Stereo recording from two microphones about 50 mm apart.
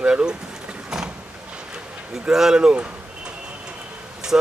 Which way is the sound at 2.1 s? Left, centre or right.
Centre.